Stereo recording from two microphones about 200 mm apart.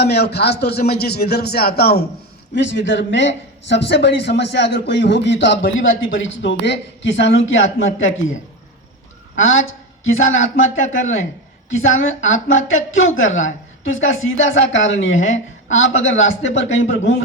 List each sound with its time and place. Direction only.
0.0 s a man's voice: 55° left (ahead or behind)
2.6 s speech: 65° left (ahead or behind)
9.3 s a man's voice: 75° left (ahead or behind)